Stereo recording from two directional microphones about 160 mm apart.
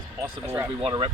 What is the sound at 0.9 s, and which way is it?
Speech, 30° right (ahead or behind).